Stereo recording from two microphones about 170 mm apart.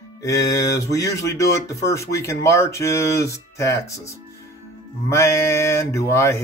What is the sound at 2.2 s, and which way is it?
Speech, 15° left (ahead or behind).